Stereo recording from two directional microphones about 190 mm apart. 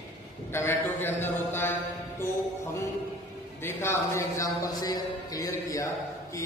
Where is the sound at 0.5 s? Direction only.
10° left (ahead or behind).